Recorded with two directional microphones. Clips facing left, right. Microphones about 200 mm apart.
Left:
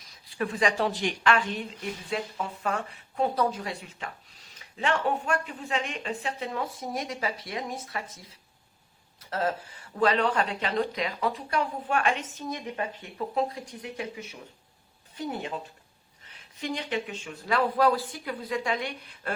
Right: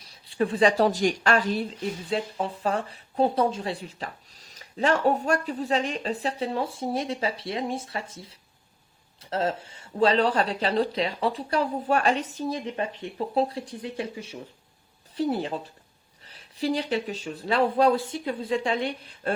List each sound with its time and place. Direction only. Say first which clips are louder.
0.3 s speech: right 6 dB; 30° right (ahead or behind)